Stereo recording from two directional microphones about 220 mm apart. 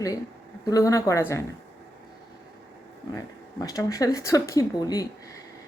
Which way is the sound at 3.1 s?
15° left (ahead or behind).